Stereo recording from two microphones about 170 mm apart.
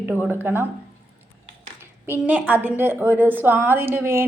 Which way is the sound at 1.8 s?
10° right (ahead or behind).